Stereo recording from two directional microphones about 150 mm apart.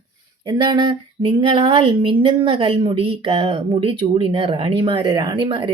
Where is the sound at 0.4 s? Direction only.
30° right (ahead or behind).